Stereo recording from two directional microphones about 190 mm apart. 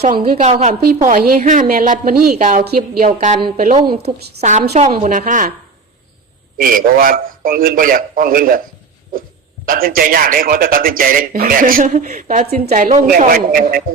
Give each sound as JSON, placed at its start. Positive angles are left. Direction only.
{"t": 0.3, "sound": "a woman's voice", "side_deg": -45}
{"t": 6.6, "sound": "speech", "side_deg": -45}
{"t": 9.6, "sound": "speech", "side_deg": -50}